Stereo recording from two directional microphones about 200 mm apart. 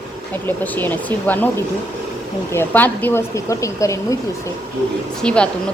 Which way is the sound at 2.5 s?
10° left (ahead or behind).